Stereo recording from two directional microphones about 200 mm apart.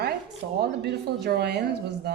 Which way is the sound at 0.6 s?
55° right (ahead or behind).